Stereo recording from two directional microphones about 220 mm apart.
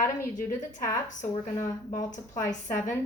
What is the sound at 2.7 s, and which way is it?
Speech, 10° left (ahead or behind).